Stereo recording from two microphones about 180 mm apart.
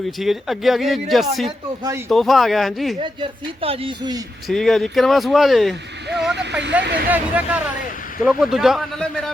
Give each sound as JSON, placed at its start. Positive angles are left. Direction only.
{"t": 0.2, "sound": "speech", "side_deg": 0}
{"t": 1.5, "sound": "speech", "side_deg": -20}
{"t": 2.0, "sound": "speech", "side_deg": 0}
{"t": 3.0, "sound": "speech", "side_deg": -30}
{"t": 4.4, "sound": "speech", "side_deg": 0}
{"t": 6.3, "sound": "speech", "side_deg": -75}
{"t": 7.1, "sound": "speech", "side_deg": -10}